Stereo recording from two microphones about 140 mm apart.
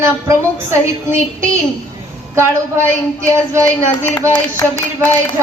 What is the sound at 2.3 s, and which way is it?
Speech, 20° right (ahead or behind).